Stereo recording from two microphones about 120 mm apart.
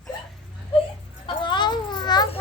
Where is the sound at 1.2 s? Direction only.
40° left (ahead or behind).